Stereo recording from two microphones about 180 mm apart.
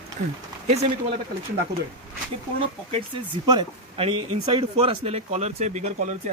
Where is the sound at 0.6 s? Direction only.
35° right (ahead or behind).